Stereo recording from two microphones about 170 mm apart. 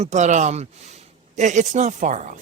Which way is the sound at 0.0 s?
45° right (ahead or behind).